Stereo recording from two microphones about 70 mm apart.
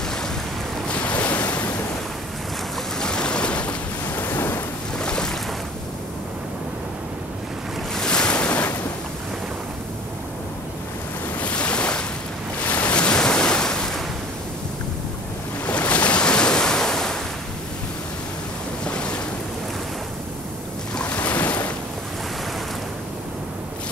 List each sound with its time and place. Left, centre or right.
0.8 s waves: centre
3.0 s waves: centre
4.1 s waves: left
4.9 s boat: centre
7.9 s waves: centre
11.3 s waves: centre
15.6 s waves: left
18.9 s waves: centre
20.9 s waves: centre